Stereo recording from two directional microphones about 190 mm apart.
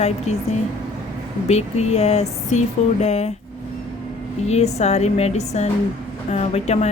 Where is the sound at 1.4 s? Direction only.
35° left (ahead or behind).